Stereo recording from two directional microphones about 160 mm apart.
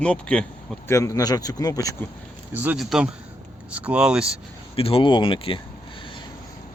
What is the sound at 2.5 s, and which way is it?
A man's voice, 10° right (ahead or behind).